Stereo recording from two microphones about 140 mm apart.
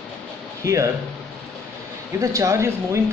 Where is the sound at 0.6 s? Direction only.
20° right (ahead or behind).